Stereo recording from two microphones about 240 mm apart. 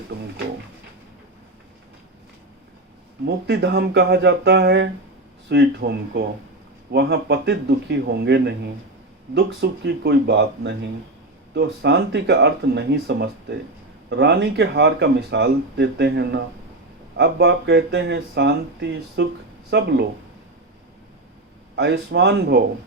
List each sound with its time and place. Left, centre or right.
3.2 s speech: right
21.8 s speech: right